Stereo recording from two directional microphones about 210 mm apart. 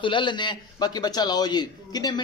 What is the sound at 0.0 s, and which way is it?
A man's voice, 20° left (ahead or behind).